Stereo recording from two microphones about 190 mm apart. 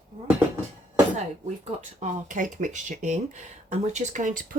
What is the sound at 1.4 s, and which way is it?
Speech, 40° right (ahead or behind).